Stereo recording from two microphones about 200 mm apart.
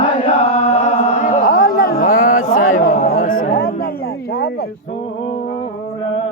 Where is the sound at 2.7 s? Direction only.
40° left (ahead or behind).